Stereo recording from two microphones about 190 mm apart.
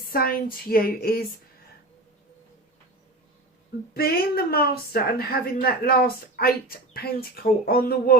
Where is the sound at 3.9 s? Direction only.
50° left (ahead or behind).